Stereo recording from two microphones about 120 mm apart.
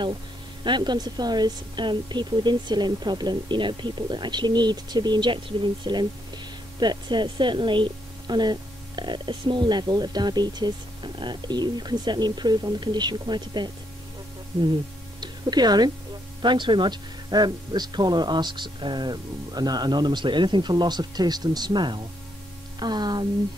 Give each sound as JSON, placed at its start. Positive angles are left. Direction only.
{"t": 0.7, "sound": "speech", "side_deg": -40}
{"t": 15.1, "sound": "music", "side_deg": -35}
{"t": 16.3, "sound": "speech", "side_deg": -40}